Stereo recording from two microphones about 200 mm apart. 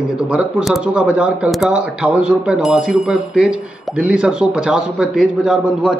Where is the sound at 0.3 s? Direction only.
5° right (ahead or behind).